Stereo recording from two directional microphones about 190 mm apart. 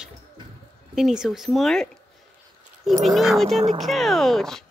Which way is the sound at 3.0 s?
Centre (ahead or behind).